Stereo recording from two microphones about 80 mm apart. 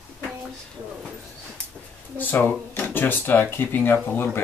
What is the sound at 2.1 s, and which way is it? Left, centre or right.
Speech, left.